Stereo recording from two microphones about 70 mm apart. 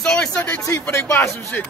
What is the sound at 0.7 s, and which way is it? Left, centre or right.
Speech, left.